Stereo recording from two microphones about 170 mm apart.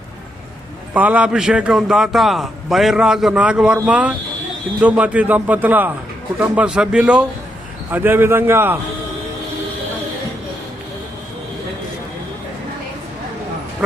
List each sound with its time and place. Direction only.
0.9 s a man's voice: 10° right (ahead or behind)